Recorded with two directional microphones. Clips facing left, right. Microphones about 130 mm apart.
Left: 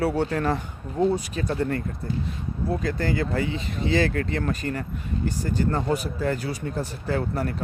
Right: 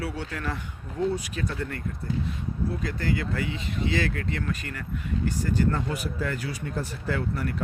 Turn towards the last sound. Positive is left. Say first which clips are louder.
# left 3 dB
turn(degrees=35)  # may be behind; listen again after turning